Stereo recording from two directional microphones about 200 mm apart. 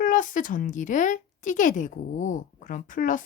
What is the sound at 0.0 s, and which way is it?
Speech, 40° left (ahead or behind).